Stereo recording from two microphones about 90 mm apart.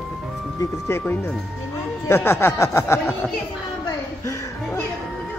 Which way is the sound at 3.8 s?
40° left (ahead or behind).